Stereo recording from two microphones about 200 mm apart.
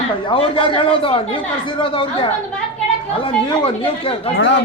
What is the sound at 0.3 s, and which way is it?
Speech, 25° left (ahead or behind).